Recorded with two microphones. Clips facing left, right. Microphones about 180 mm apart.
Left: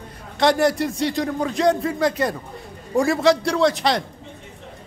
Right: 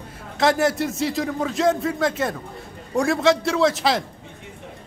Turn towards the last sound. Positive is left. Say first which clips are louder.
# left 1 dB
turn(degrees=0)  # may be behind; listen again after turning